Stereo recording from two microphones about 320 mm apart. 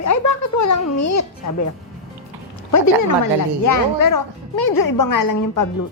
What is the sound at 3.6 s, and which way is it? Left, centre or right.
Speech, left.